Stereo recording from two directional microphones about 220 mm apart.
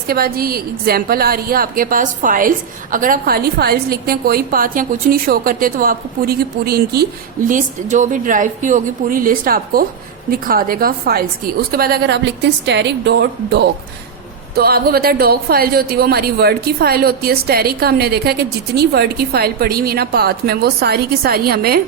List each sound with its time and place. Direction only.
0.1 s a woman's voice: 45° right (ahead or behind)